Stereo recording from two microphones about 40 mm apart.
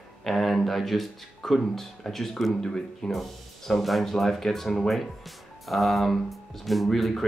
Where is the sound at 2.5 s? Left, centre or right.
Centre.